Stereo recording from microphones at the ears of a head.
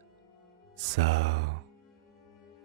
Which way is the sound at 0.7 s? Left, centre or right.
Right.